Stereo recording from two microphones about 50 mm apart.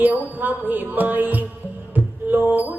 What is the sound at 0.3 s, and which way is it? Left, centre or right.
Music, right.